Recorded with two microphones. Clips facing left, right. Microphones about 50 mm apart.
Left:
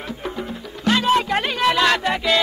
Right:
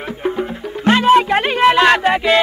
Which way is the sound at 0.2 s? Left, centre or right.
Right.